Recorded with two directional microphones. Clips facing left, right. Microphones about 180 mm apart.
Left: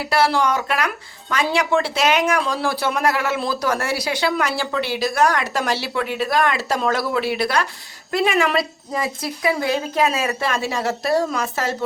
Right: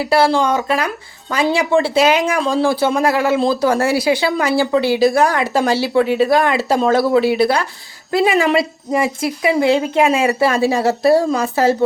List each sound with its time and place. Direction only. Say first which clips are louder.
0.1 s a woman's voice: right 4 dB; 25° right (ahead or behind)